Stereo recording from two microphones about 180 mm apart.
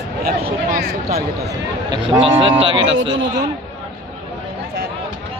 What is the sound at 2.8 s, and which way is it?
Speech, 90° right.